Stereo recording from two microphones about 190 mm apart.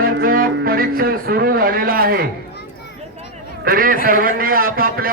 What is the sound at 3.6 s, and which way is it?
Speech, 50° right (ahead or behind).